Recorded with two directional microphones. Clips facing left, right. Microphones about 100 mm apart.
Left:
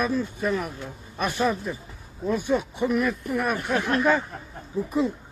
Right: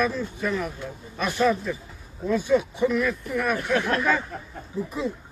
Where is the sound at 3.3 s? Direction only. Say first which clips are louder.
Right 1 dB; 35° left (ahead or behind).